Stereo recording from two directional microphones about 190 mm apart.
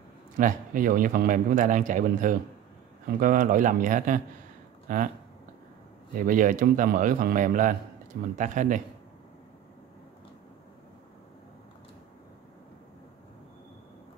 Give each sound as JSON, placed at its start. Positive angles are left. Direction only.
{"t": 0.4, "sound": "a man's voice", "side_deg": -45}
{"t": 6.1, "sound": "a man's voice", "side_deg": -45}